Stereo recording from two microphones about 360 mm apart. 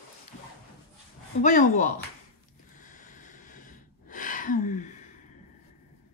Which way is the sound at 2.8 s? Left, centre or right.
Left.